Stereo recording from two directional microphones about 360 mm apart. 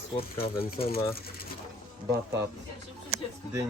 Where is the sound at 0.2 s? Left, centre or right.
Centre.